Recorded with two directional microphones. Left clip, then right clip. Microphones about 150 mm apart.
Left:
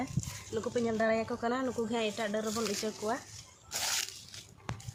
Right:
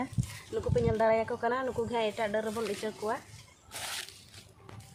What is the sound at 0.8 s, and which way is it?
Speech, 5° right (ahead or behind).